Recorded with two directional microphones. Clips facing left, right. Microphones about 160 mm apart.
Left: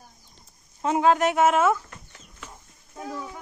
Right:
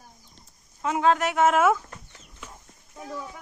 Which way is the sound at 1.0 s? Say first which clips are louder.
Left 2 dB; 20° left (ahead or behind).